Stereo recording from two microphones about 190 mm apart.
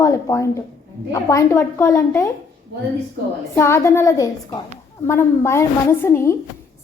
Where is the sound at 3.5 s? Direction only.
15° left (ahead or behind).